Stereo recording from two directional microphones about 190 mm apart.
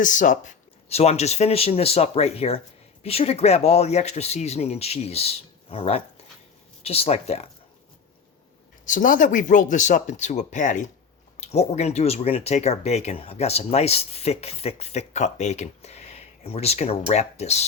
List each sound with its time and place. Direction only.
0.0 s speech: 40° left (ahead or behind)
8.8 s speech: 45° left (ahead or behind)